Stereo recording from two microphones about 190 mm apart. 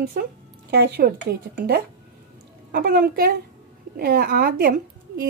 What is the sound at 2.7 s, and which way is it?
Speech, 55° right (ahead or behind).